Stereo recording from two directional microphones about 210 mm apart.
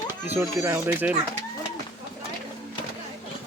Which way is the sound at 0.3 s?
10° right (ahead or behind).